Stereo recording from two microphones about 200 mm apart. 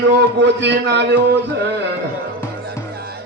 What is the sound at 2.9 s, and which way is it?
Music, 55° right (ahead or behind).